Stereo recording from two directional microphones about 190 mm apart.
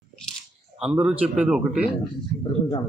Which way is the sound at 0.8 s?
5° right (ahead or behind).